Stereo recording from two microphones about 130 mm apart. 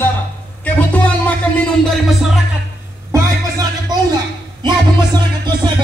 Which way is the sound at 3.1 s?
30° right (ahead or behind).